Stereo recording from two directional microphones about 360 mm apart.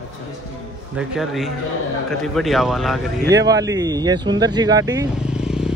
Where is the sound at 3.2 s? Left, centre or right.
Right.